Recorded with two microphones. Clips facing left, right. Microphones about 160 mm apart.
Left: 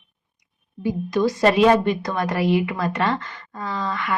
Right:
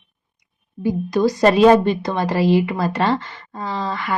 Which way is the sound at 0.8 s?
40° right (ahead or behind).